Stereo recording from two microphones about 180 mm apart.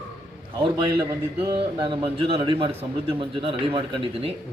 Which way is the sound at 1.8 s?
30° right (ahead or behind).